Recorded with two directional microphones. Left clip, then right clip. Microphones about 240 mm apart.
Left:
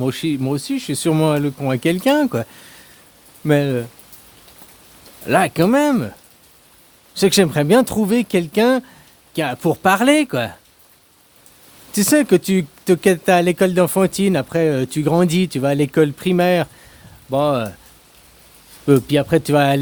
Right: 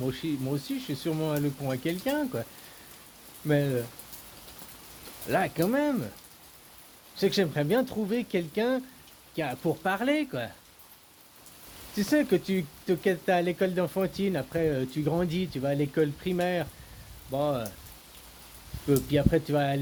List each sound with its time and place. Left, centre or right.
0.0 s speech: left
5.3 s speech: left
7.2 s speech: left
11.9 s speech: left
18.9 s speech: left